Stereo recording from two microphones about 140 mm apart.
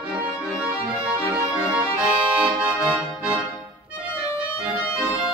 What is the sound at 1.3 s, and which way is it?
Accordion, 10° right (ahead or behind).